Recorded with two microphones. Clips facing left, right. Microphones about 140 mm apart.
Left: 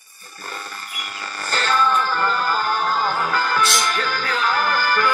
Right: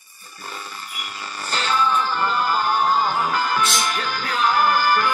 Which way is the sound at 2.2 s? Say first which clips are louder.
Even; 15° right (ahead or behind).